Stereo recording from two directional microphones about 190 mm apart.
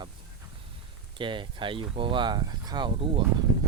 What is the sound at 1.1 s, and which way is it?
Speech, 25° right (ahead or behind).